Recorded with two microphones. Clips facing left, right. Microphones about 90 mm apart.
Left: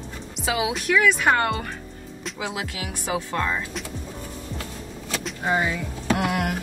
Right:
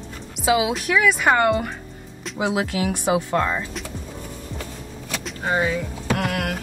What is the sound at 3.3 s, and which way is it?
Speech, 15° right (ahead or behind).